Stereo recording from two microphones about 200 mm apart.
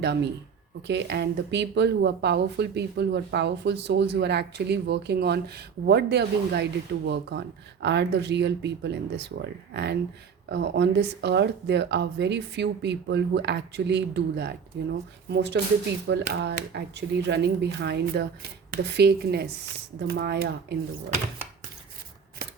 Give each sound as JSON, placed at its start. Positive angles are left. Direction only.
{"t": 0.0, "sound": "a woman's voice", "side_deg": -55}